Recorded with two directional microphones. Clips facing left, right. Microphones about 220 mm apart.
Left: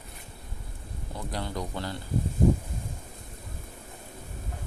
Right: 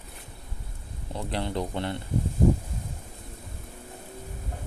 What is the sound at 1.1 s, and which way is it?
Speech, 25° right (ahead or behind).